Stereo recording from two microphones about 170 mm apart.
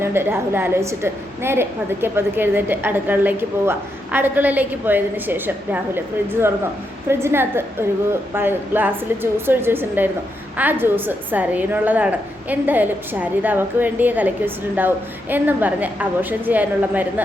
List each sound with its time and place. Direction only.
0.0 s a woman's voice: 15° right (ahead or behind)
7.1 s a woman's voice: 15° right (ahead or behind)